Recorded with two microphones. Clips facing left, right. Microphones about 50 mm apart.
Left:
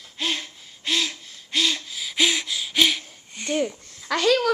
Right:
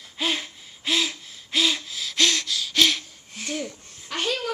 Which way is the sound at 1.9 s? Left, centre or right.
Centre.